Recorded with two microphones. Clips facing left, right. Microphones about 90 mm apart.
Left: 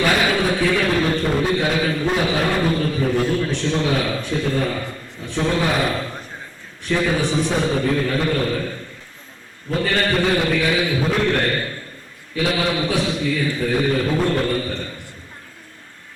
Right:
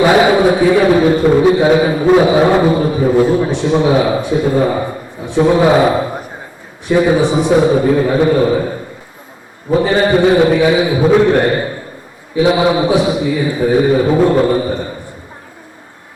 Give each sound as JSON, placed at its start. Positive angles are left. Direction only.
{"t": 0.0, "sound": "a sound", "side_deg": -25}
{"t": 2.2, "sound": "a man's voice", "side_deg": -20}
{"t": 5.5, "sound": "a man's voice", "side_deg": -30}